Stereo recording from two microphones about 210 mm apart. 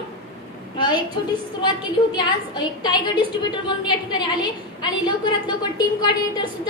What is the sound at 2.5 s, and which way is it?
A woman's voice, 20° left (ahead or behind).